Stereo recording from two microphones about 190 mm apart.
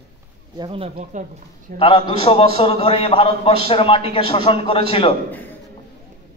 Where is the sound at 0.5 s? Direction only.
30° right (ahead or behind).